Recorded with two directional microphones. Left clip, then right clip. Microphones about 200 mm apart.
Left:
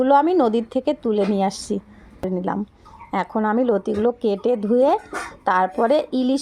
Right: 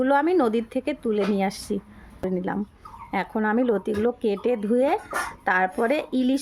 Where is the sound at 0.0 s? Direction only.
5° left (ahead or behind).